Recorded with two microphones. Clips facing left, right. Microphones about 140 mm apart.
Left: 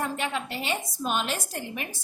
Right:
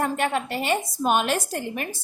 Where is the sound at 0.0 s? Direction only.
55° right (ahead or behind).